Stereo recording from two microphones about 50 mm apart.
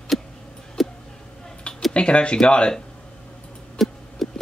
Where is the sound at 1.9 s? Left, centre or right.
Left.